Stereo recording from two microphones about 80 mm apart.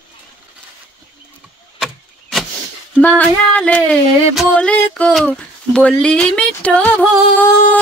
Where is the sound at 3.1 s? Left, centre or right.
Centre.